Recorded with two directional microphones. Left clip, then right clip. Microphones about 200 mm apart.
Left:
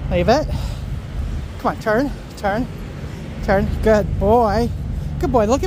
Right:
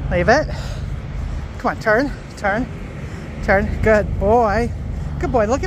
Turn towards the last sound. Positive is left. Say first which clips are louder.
# left 1 dB
turn(degrees=25)  # may be behind; listen again after turning